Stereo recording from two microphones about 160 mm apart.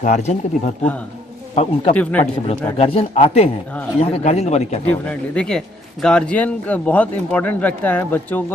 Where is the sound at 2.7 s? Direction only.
40° left (ahead or behind).